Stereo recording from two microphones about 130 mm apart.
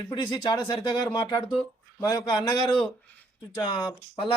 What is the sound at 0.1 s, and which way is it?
Speech, 35° left (ahead or behind).